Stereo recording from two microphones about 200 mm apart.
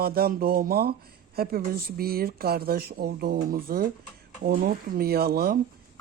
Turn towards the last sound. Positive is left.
turn(degrees=-50)  # may be behind; listen again after turning